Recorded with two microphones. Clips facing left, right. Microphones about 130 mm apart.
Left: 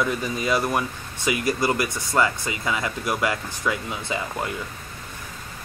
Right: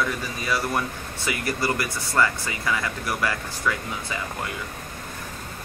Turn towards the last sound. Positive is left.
turn(degrees=20)  # may be behind; listen again after turning